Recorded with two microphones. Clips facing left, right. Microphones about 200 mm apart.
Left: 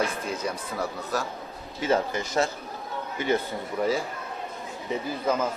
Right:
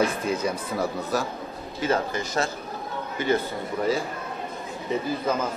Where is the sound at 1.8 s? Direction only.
20° left (ahead or behind).